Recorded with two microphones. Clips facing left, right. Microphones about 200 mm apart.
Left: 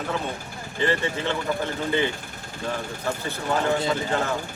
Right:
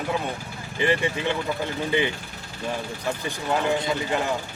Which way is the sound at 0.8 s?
15° right (ahead or behind).